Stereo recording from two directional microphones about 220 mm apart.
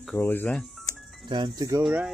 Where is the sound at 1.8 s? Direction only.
Centre (ahead or behind).